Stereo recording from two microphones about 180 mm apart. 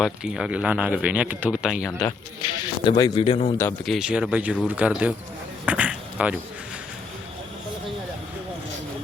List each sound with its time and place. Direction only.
0.0 s speech: 5° right (ahead or behind)
2.4 s speech: 25° left (ahead or behind)
3.8 s speech: 5° right (ahead or behind)